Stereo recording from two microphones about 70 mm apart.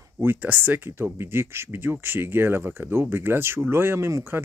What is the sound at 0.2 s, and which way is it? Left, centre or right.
Speech, right.